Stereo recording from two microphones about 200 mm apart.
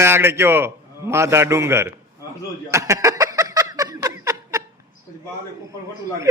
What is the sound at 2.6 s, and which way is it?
Snicker, 15° right (ahead or behind).